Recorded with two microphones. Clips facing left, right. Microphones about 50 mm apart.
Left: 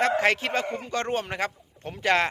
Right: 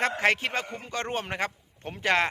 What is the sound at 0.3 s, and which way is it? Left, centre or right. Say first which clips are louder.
A man's voice: left 1 dB; centre.